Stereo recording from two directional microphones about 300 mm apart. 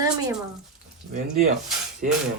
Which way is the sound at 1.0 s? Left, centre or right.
Right.